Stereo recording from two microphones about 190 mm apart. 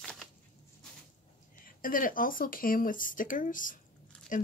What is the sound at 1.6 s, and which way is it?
Speech, 45° left (ahead or behind).